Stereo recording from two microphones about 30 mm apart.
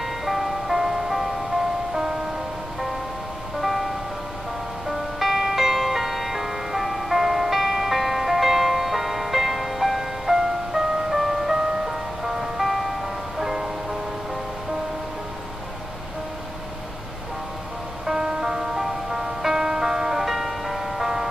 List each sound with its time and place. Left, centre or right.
0.0 s music: centre
3.6 s music: centre
18.0 s music: right